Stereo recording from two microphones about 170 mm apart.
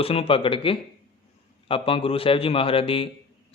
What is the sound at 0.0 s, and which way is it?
Speech, 35° left (ahead or behind).